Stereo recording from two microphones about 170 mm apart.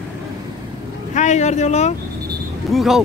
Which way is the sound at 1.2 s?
45° left (ahead or behind).